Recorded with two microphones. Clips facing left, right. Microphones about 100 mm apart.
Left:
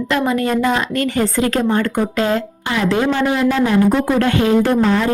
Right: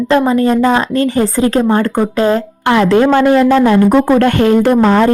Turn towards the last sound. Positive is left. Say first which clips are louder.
# right 6 dB
turn(degrees=-60)  # may be behind; listen again after turning